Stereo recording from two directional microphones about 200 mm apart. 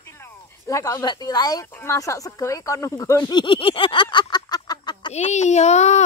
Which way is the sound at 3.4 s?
25° left (ahead or behind).